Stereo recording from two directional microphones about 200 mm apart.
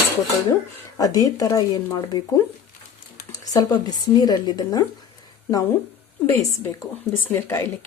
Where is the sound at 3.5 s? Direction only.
15° left (ahead or behind).